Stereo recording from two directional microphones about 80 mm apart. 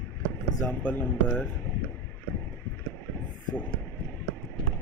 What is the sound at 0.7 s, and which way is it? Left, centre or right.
Speech, centre.